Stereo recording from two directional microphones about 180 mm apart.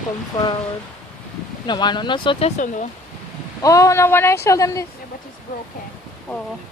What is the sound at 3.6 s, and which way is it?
Speech, 20° left (ahead or behind).